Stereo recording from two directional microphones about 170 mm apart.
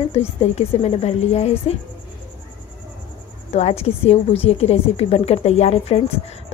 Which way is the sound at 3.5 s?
40° left (ahead or behind).